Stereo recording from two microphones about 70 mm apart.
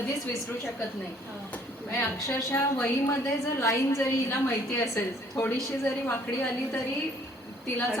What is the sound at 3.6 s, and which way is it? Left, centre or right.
A woman's voice, left.